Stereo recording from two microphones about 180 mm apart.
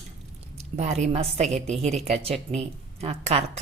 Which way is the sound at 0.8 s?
40° right (ahead or behind).